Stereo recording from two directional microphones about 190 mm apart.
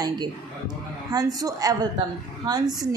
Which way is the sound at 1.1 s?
20° right (ahead or behind).